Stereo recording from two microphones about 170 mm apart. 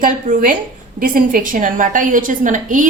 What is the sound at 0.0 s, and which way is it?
A woman's voice, 50° right (ahead or behind).